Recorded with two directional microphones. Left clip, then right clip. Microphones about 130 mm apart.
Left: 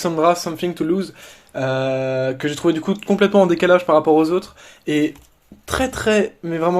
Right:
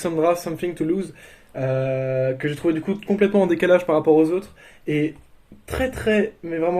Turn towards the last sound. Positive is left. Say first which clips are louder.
# left 3 dB
turn(degrees=25)  # may be behind; listen again after turning